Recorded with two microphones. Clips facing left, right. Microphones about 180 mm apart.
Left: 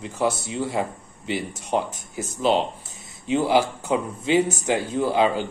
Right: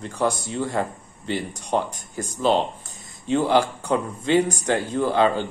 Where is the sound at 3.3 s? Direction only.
5° left (ahead or behind).